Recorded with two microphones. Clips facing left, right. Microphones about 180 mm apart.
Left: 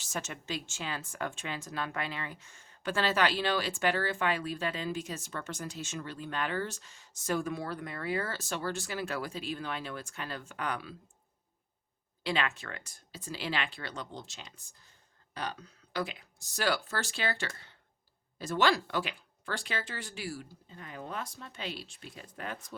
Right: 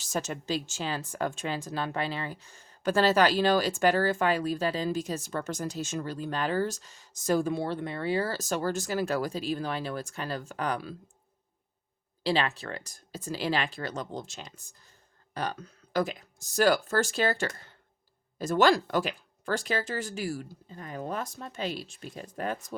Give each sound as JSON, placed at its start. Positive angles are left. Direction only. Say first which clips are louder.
{"t": 0.0, "sound": "speech", "louder": "right 6 dB", "side_deg": -35}
{"t": 12.2, "sound": "speech", "louder": "right 5 dB", "side_deg": -35}